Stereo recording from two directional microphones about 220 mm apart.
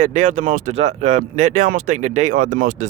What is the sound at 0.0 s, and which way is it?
Speech, 35° right (ahead or behind).